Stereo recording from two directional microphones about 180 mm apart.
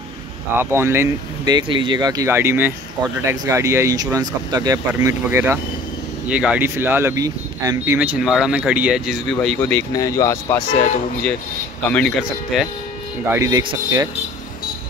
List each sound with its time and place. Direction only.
0.6 s speech: 15° right (ahead or behind); by 10.6 s 15° left (ahead or behind)
11.9 s speech: centre (ahead or behind)
13.3 s speech: 20° right (ahead or behind)